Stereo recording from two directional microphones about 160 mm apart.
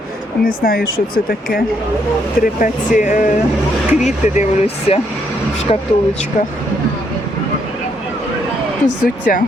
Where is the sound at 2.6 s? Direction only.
50° left (ahead or behind).